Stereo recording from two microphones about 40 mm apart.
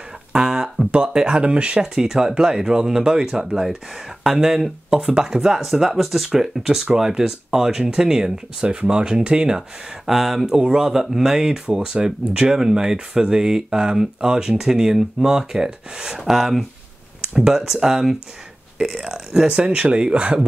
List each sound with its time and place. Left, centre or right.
0.3 s a sound: centre
0.9 s speech: right
2.0 s speech: centre
10.0 s speech: centre
11.7 s speech: centre
19.4 s speech: right